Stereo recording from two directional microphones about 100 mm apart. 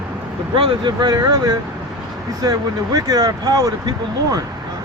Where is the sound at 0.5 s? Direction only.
55° right (ahead or behind).